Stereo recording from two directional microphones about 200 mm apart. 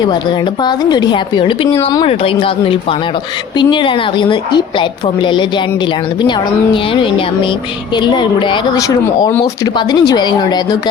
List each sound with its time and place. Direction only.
0.6 s a woman's voice: 20° left (ahead or behind)
8.0 s a woman's voice: 25° left (ahead or behind)